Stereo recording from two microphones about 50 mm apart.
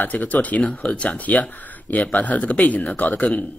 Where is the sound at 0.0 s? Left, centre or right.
Left.